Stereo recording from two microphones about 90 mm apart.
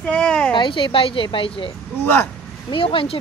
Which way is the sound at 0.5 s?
65° left (ahead or behind).